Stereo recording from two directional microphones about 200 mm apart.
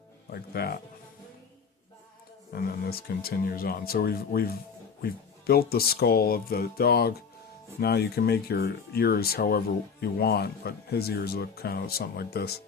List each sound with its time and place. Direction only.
0.3 s speech: 50° left (ahead or behind)
2.5 s speech: 50° left (ahead or behind)